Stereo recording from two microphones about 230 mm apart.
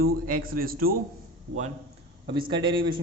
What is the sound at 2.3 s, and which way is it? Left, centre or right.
Speech, right.